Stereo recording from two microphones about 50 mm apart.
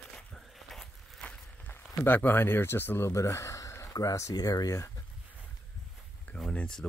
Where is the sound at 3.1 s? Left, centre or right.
Left.